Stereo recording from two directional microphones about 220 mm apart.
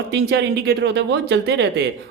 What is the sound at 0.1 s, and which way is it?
Speech, 50° right (ahead or behind).